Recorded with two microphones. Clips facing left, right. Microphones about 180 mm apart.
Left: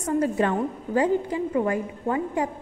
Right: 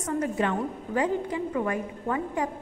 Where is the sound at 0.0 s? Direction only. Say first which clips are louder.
Left 4 dB; 35° left (ahead or behind).